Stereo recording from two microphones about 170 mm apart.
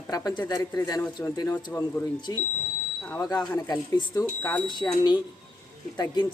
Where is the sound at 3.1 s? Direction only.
20° left (ahead or behind).